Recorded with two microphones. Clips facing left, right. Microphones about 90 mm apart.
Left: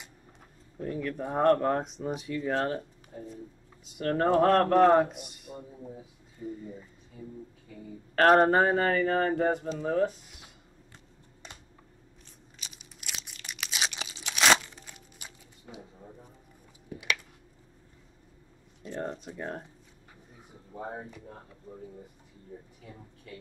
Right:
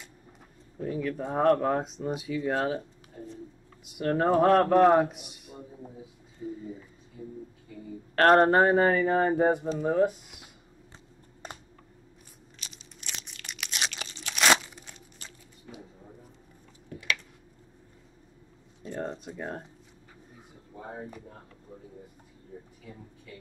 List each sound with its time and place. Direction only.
0.7 s a man's voice: centre (ahead or behind)
4.0 s a man's voice: 5° right (ahead or behind)
8.2 s speech: centre (ahead or behind)
12.5 s crunch: 5° left (ahead or behind)
15.1 s a sound: 10° left (ahead or behind)
16.9 s a sound: 15° left (ahead or behind)
18.9 s a man's voice: centre (ahead or behind)